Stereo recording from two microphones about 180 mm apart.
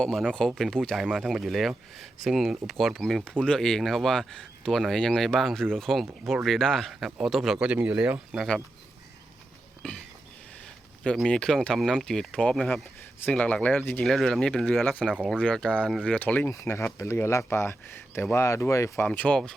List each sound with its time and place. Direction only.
0.0 s speech: 5° left (ahead or behind)
11.0 s speech: 5° left (ahead or behind)